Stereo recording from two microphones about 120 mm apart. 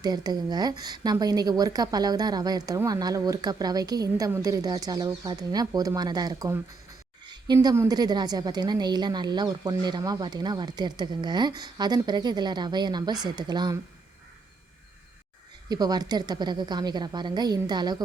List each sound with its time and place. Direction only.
0.0 s a woman's voice: 35° right (ahead or behind)
7.3 s a sound: 35° right (ahead or behind)
7.9 s a woman's voice: 35° right (ahead or behind)
15.7 s a woman's voice: 35° right (ahead or behind)